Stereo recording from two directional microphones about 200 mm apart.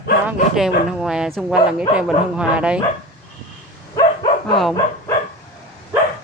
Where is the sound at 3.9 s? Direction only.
25° left (ahead or behind).